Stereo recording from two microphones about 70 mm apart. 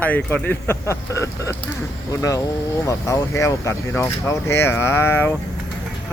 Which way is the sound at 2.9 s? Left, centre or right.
Left.